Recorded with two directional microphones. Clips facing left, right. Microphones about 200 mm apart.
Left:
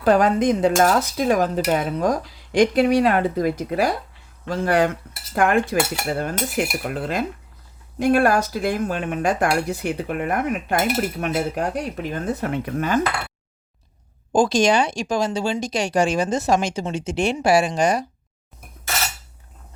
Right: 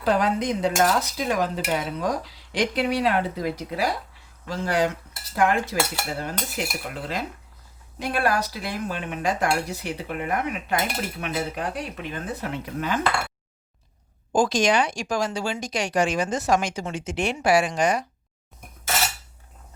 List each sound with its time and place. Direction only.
0.0 s cutlery: 50° left (ahead or behind)
14.3 s speech: 30° left (ahead or behind)